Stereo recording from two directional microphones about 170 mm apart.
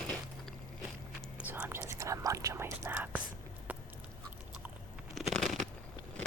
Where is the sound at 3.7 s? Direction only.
10° right (ahead or behind).